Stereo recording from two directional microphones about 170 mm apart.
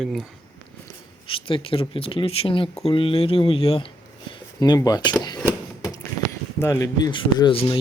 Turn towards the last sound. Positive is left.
turn(degrees=30)  # may be behind; listen again after turning